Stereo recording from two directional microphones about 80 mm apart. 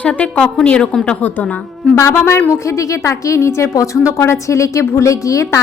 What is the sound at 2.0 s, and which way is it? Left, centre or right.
A woman's voice, left.